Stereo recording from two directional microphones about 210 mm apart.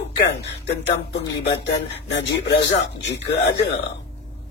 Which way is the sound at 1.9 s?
55° left (ahead or behind).